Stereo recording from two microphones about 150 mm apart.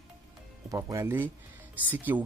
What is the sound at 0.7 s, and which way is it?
Speech, 25° right (ahead or behind).